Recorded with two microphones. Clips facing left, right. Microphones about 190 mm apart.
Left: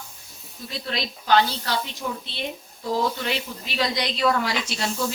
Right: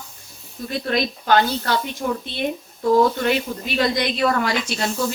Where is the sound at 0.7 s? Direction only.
50° right (ahead or behind).